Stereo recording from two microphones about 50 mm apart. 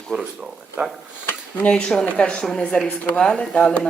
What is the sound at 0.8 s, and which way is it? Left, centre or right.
Speech, right.